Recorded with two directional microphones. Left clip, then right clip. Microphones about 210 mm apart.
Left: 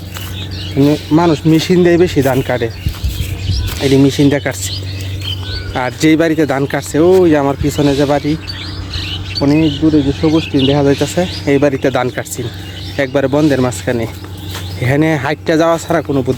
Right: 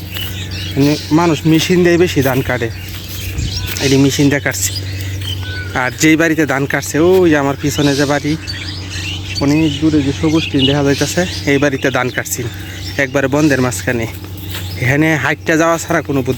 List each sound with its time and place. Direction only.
0.8 s speech: 10° left (ahead or behind)
3.8 s speech: centre (ahead or behind)
5.7 s speech: centre (ahead or behind)
9.4 s speech: centre (ahead or behind)